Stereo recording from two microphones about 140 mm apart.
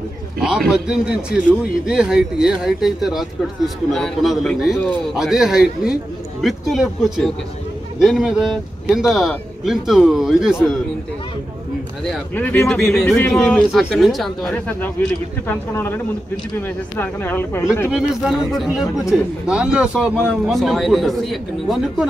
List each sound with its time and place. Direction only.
0.4 s a man's voice: 5° right (ahead or behind)
12.4 s a man's voice: 10° left (ahead or behind)
15.0 s speech: 15° left (ahead or behind)
17.9 s a man's voice: 5° right (ahead or behind)